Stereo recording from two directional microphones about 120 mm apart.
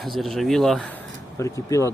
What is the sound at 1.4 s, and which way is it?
Speech, 25° left (ahead or behind).